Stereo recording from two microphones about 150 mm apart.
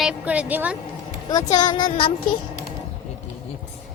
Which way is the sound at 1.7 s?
30° left (ahead or behind).